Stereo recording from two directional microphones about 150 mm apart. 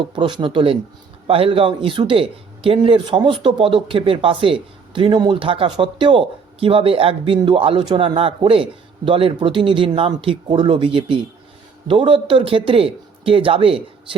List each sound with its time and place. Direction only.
0.2 s a man's voice: 30° right (ahead or behind)